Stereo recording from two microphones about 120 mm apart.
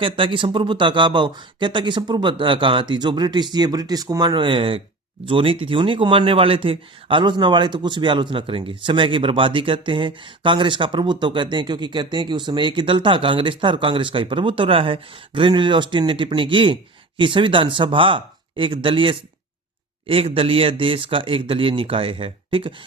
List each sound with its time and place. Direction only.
0.0 s speech: 45° right (ahead or behind)